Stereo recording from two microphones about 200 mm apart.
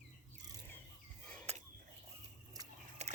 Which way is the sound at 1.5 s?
30° right (ahead or behind).